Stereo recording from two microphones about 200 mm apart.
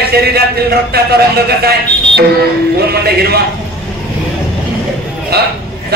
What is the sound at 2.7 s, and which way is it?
Speech, 50° right (ahead or behind).